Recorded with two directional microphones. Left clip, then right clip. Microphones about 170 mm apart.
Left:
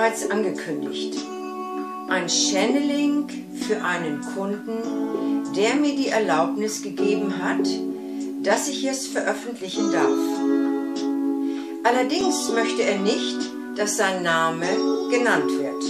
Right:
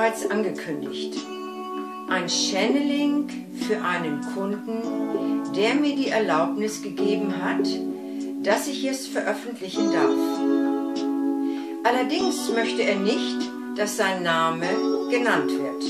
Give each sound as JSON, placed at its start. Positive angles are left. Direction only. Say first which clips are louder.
{"t": 2.0, "sound": "speech", "louder": "left 2 dB", "side_deg": 0}
{"t": 5.2, "sound": "speech", "louder": "left 2 dB", "side_deg": 0}
{"t": 10.5, "sound": "music", "louder": "even", "side_deg": -35}
{"t": 11.8, "sound": "speech", "louder": "left 2 dB", "side_deg": 0}